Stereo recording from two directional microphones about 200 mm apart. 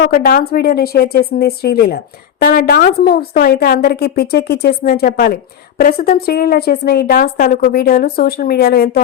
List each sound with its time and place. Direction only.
0.0 s a woman's voice: 45° left (ahead or behind)